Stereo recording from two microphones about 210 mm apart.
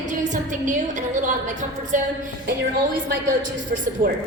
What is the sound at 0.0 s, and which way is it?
A woman's voice, 35° right (ahead or behind).